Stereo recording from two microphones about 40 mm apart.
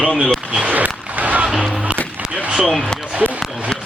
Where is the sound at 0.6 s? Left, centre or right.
Right.